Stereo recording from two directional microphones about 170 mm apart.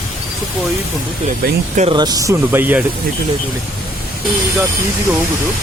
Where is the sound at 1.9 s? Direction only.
25° right (ahead or behind).